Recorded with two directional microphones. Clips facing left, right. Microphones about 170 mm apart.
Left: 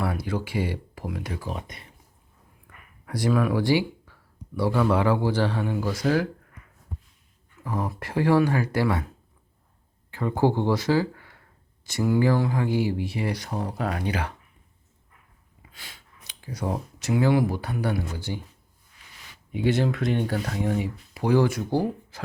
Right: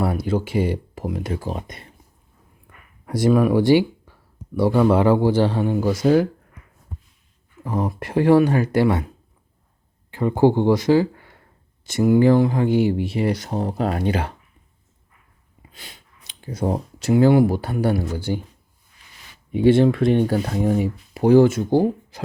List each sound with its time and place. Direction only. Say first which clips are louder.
0.0 s speech: right 6 dB; 25° right (ahead or behind)
1.0 s speech: right 6 dB; 30° right (ahead or behind)
3.1 s speech: right 7 dB; 20° right (ahead or behind)
7.6 s speech: right 5 dB; 25° right (ahead or behind)
10.1 s speech: right 6 dB; 20° right (ahead or behind)
15.7 s speech: right 3 dB; 20° right (ahead or behind)
19.7 s speech: right 7 dB; 25° right (ahead or behind)